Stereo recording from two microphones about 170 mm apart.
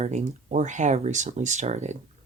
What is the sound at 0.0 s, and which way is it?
Speech, 40° right (ahead or behind).